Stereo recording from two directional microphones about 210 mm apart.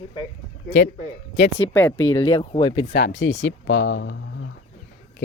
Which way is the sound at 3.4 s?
70° left (ahead or behind).